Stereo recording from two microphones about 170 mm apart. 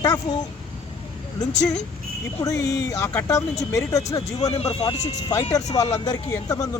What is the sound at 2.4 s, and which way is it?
Speech, 20° left (ahead or behind).